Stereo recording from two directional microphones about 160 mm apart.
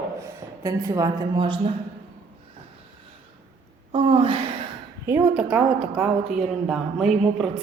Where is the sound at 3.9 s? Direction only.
35° right (ahead or behind).